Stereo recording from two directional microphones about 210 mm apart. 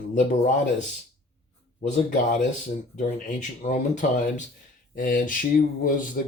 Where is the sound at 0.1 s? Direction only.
35° left (ahead or behind).